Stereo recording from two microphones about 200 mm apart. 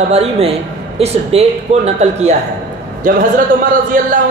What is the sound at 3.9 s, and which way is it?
Speech, 45° right (ahead or behind).